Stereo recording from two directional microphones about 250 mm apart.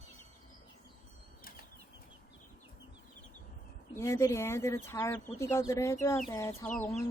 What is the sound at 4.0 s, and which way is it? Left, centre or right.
Speech, centre.